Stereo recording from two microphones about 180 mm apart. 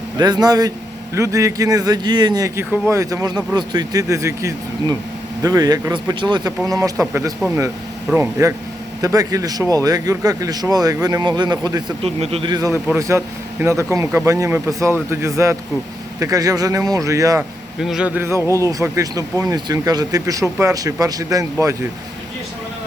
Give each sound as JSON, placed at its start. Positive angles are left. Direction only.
{"t": 0.2, "sound": "a man's voice", "side_deg": -20}
{"t": 12.0, "sound": "a man's voice", "side_deg": -35}
{"t": 17.7, "sound": "a man's voice", "side_deg": 0}